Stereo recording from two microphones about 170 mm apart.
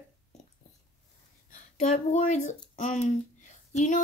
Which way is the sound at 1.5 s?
45° left (ahead or behind).